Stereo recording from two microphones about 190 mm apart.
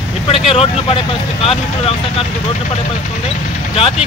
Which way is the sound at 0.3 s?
30° left (ahead or behind).